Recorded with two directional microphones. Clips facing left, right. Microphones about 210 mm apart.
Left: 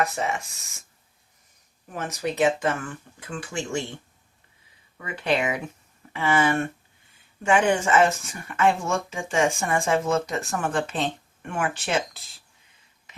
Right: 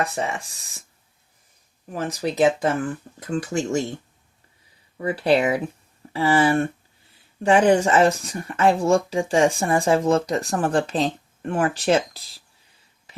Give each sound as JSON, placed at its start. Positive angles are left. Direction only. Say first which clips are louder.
{"t": 0.0, "sound": "speech", "louder": "even", "side_deg": -30}
{"t": 1.9, "sound": "speech", "louder": "right 3 dB", "side_deg": -30}